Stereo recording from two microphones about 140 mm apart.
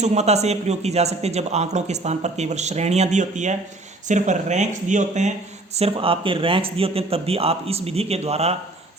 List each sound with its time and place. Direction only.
0.0 s a man's voice: 50° right (ahead or behind)
5.7 s a man's voice: 45° right (ahead or behind)